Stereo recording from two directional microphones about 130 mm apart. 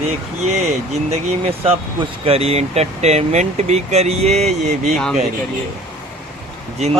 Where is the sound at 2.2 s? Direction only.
50° right (ahead or behind).